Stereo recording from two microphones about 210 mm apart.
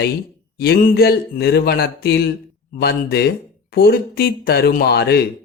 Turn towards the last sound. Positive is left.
turn(degrees=50)  # may be behind; listen again after turning